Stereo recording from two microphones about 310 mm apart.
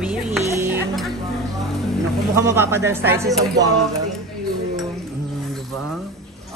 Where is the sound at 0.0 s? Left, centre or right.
Centre.